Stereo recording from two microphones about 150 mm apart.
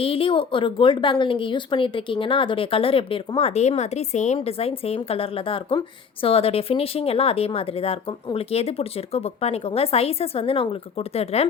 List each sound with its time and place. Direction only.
0.0 s speech: 35° left (ahead or behind)